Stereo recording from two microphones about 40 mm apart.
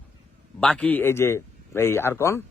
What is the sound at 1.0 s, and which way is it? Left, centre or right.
Speech, left.